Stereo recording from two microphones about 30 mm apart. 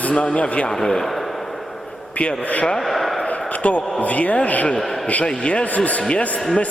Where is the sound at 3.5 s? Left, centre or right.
Left.